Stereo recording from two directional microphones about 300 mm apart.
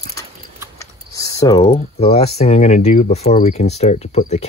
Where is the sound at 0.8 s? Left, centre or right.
Centre.